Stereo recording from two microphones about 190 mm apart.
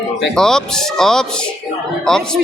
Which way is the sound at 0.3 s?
5° left (ahead or behind).